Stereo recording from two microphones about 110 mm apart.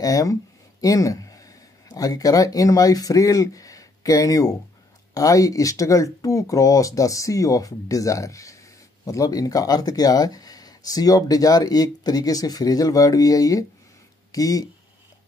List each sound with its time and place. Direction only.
0.0 s speech: 30° left (ahead or behind)